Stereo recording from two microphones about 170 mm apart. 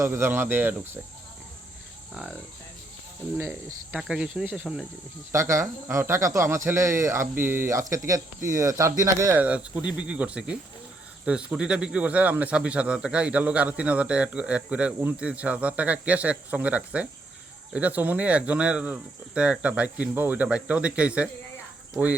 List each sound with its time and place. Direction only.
0.0 s speech: 15° right (ahead or behind)
2.1 s speech: 5° right (ahead or behind)
3.9 s speech: 5° right (ahead or behind)
5.3 s speech: 20° right (ahead or behind)